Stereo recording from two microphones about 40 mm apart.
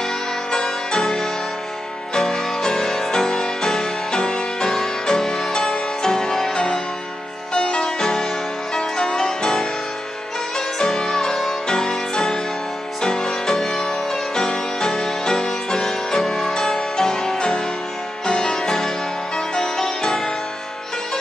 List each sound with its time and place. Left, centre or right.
0.0 s music: centre
10.8 s music: centre